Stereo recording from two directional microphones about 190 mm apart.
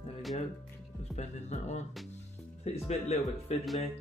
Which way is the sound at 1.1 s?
35° left (ahead or behind).